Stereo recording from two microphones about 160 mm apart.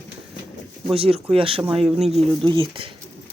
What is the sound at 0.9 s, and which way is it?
Speech, 35° right (ahead or behind).